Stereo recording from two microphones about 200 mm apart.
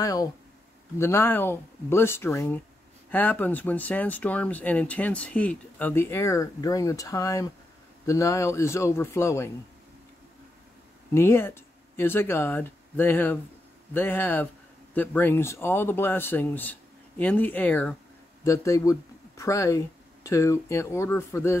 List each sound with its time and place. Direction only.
0.0 s speech: 15° left (ahead or behind)
11.1 s speech: 10° left (ahead or behind)